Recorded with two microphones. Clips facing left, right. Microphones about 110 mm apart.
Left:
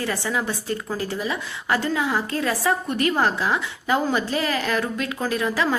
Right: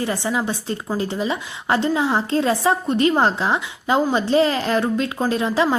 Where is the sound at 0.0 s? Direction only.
20° right (ahead or behind).